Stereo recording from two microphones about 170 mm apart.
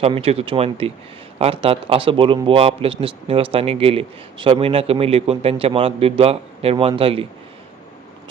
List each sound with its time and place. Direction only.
0.0 s a man's voice: 35° right (ahead or behind)